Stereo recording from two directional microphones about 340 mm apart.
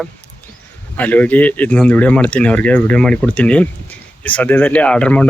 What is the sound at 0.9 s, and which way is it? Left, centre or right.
Speech, centre.